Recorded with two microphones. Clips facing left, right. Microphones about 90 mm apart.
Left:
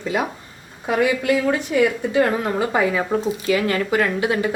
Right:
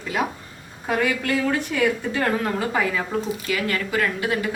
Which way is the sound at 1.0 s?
15° left (ahead or behind).